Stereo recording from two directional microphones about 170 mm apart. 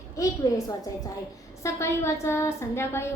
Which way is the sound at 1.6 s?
15° left (ahead or behind).